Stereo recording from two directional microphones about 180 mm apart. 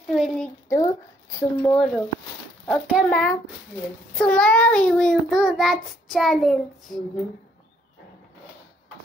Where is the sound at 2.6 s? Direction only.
Centre (ahead or behind).